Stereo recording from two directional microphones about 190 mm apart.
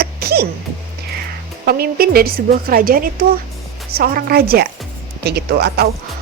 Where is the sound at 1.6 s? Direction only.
55° right (ahead or behind).